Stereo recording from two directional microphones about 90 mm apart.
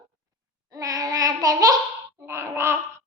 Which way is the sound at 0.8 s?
45° right (ahead or behind).